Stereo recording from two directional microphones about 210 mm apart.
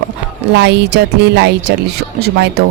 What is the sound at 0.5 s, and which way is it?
A woman's voice, 55° right (ahead or behind).